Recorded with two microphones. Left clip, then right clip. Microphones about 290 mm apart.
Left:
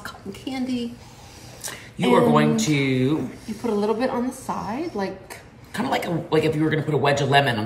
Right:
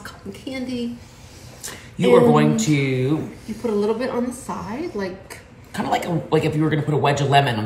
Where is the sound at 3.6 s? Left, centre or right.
Centre.